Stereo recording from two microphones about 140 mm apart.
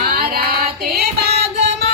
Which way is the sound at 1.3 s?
50° right (ahead or behind).